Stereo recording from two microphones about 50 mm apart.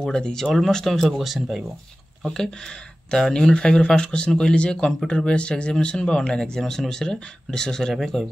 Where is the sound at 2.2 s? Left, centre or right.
Centre.